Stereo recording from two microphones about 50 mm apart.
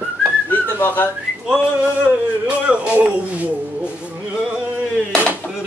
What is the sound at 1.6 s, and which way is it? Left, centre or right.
Speech, centre.